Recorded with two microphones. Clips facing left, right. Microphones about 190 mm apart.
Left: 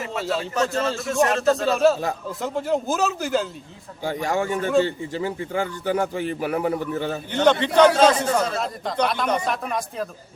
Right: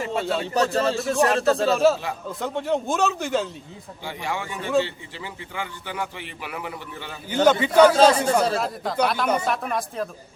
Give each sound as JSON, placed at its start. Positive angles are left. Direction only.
{"t": 0.2, "sound": "a man's voice", "side_deg": 0}
{"t": 0.5, "sound": "speech", "side_deg": -35}
{"t": 1.6, "sound": "speech", "side_deg": 0}
{"t": 4.0, "sound": "a man's voice", "side_deg": 45}
{"t": 7.4, "sound": "speech", "side_deg": -5}